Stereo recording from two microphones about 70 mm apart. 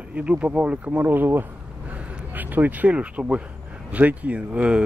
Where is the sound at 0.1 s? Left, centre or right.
Centre.